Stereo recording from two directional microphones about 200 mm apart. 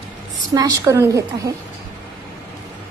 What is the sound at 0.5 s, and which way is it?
A woman's voice, 20° right (ahead or behind).